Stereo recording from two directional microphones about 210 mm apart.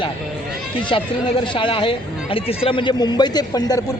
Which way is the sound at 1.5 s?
25° left (ahead or behind).